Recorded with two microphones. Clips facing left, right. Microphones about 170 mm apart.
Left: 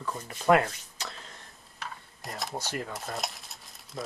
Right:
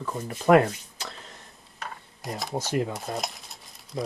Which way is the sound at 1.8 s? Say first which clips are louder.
Right 3 dB; centre (ahead or behind).